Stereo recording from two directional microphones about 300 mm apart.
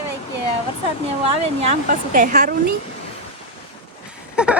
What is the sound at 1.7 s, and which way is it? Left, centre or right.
Speech, right.